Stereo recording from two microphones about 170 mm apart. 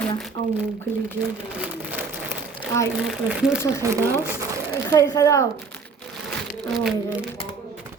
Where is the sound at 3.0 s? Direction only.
5° right (ahead or behind).